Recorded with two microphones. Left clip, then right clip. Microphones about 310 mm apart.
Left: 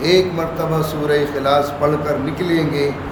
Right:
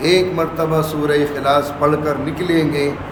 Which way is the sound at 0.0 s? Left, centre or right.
Centre.